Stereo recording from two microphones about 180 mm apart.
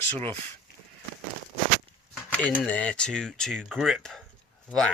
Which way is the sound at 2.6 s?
5° left (ahead or behind).